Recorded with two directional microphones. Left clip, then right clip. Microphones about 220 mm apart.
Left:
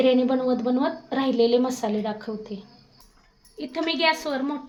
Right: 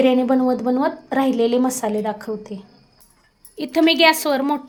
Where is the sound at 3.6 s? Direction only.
50° right (ahead or behind).